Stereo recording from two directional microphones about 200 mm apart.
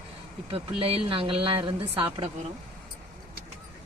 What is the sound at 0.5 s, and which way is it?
Speech, 30° right (ahead or behind).